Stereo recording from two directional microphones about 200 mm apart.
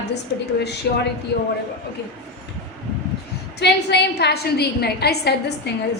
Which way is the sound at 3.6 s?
55° left (ahead or behind).